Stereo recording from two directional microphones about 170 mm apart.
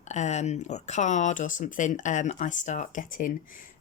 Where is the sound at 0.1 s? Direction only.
45° left (ahead or behind).